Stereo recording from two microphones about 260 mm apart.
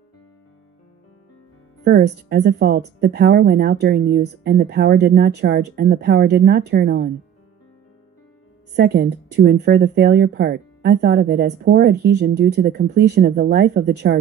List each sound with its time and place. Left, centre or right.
1.9 s speech: right
8.7 s speech: right